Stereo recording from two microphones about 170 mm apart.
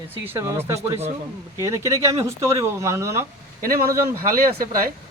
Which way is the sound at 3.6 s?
55° right (ahead or behind).